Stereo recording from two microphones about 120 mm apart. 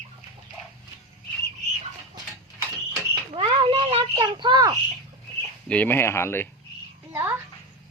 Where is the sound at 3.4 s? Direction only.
45° right (ahead or behind).